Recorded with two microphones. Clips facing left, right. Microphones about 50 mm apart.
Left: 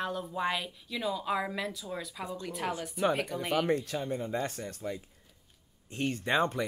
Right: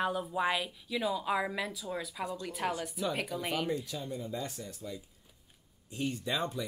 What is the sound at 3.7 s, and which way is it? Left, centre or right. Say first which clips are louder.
Speech: left 5 dB; left.